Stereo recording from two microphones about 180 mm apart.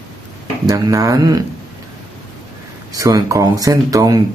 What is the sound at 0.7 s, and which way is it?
Speech, 20° right (ahead or behind).